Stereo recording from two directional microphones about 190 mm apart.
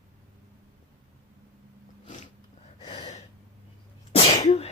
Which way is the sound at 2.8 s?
30° left (ahead or behind).